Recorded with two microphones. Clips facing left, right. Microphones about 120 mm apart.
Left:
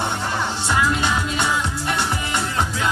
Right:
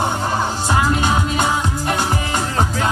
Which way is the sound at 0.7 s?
40° right (ahead or behind).